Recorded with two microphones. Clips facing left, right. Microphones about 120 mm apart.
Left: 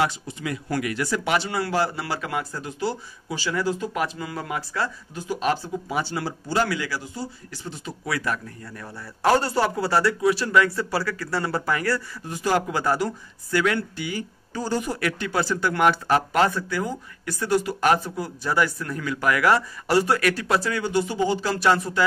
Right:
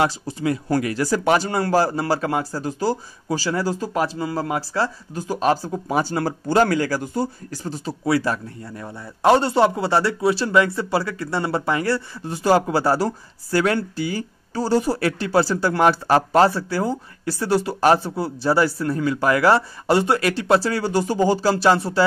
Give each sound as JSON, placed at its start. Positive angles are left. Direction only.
{"t": 0.3, "sound": "speech", "side_deg": -35}